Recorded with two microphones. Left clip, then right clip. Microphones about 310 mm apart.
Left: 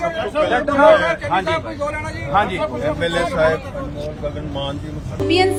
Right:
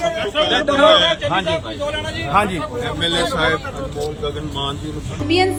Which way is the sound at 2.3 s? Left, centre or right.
Right.